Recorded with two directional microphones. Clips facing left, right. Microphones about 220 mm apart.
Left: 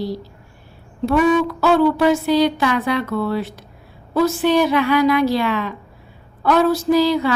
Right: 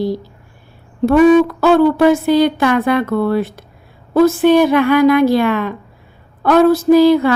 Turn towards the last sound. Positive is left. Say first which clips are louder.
# right 7 dB
turn(degrees=-55)  # may be behind; listen again after turning